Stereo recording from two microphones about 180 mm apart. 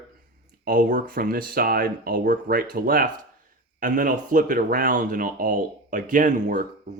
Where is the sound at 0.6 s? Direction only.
50° right (ahead or behind).